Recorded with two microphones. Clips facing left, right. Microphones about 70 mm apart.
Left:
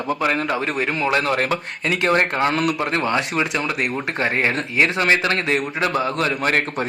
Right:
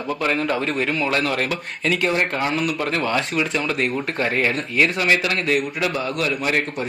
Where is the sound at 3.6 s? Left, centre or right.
Centre.